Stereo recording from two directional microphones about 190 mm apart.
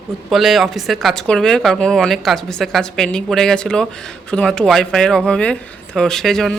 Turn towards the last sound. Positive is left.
turn(degrees=0)  # may be behind; listen again after turning